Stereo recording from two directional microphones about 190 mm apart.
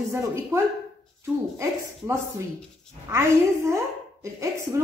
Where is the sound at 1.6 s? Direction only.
15° right (ahead or behind).